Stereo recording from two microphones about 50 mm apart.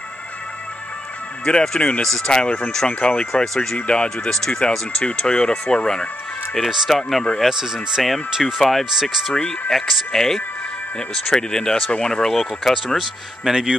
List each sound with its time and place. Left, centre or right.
1.4 s speech: centre
2.9 s speech: left
6.9 s speech: centre
7.4 s speech: centre
8.0 s speech: centre
9.3 s speech: centre
12.7 s speech: centre